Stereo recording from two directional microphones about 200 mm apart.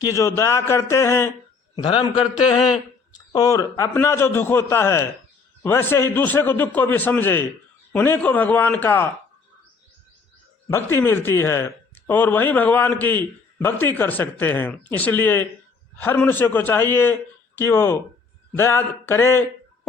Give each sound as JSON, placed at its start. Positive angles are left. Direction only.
{"t": 0.0, "sound": "a man's voice", "side_deg": 15}
{"t": 3.3, "sound": "speech", "side_deg": 15}
{"t": 10.7, "sound": "speech", "side_deg": 15}